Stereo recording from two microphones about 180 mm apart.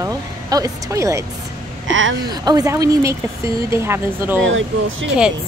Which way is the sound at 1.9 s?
90° right.